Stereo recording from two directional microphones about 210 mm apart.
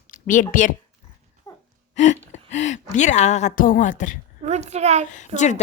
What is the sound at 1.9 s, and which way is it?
Gasp, 35° left (ahead or behind).